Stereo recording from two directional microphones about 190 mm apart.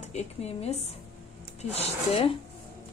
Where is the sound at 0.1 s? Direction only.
35° left (ahead or behind).